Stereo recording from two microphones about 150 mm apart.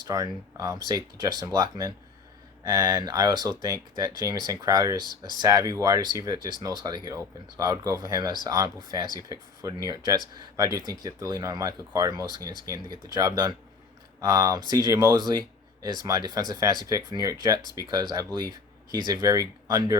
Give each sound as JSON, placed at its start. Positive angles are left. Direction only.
{"t": 0.0, "sound": "speech", "side_deg": -25}